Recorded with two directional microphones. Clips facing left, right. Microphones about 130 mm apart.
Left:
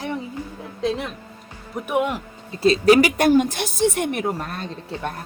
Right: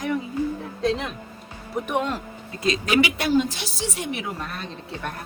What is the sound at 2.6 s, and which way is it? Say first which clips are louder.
A woman's voice: left 7 dB; 35° left (ahead or behind).